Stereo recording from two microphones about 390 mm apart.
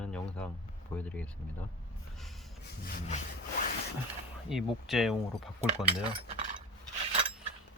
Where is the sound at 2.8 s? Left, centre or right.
Centre.